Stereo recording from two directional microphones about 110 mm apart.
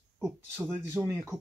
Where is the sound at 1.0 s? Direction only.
10° right (ahead or behind).